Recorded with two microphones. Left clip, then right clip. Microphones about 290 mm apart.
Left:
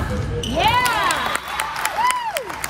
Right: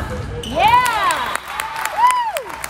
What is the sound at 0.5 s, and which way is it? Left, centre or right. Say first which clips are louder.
Crowd: right 4 dB; right.